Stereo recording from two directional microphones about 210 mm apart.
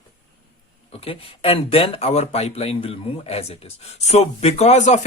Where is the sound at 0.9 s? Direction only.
25° left (ahead or behind).